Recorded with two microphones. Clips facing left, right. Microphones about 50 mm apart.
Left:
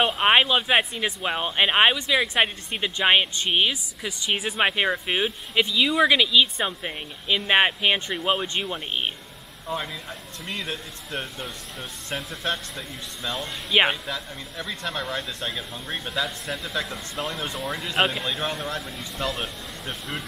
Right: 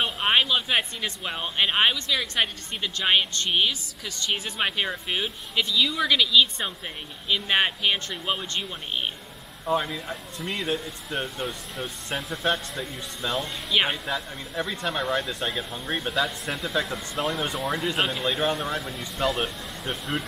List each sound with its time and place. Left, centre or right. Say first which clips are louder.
0.0 s speech: left 4 dB; left
9.7 s speech: right 5 dB; centre
13.7 s speech: left 4 dB; left
14.0 s speech: right 2 dB; centre